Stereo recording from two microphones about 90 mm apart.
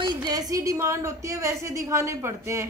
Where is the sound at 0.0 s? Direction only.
50° right (ahead or behind).